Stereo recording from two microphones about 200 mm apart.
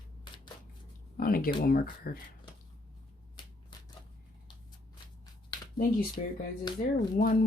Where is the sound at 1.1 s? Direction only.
45° left (ahead or behind).